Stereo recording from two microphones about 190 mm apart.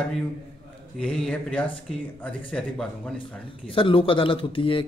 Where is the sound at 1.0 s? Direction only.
5° left (ahead or behind).